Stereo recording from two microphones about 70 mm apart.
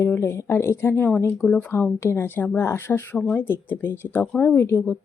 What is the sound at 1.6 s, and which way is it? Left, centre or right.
A woman's voice, left.